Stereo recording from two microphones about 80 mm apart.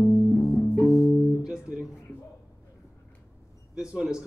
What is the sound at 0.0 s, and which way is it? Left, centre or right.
Music, centre.